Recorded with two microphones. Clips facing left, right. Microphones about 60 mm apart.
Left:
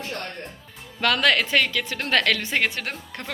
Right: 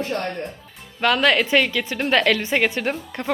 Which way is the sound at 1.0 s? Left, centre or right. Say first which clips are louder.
Right 3 dB; centre.